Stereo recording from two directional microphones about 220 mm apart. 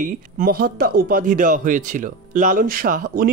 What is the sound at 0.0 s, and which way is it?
Speech, 40° right (ahead or behind).